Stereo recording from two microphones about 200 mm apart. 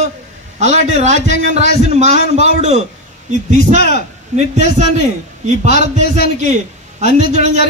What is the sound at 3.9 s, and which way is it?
A man's voice, 35° right (ahead or behind).